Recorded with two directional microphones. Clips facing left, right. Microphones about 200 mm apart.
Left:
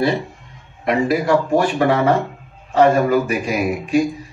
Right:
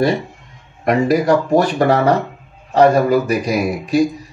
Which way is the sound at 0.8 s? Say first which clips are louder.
Right 3 dB; 40° right (ahead or behind).